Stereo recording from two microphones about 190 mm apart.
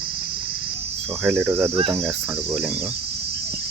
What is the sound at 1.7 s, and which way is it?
Speech, 30° right (ahead or behind).